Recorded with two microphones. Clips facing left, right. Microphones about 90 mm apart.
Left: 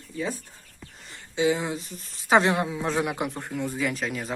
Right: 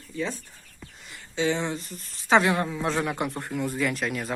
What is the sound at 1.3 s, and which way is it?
Speech, 15° left (ahead or behind).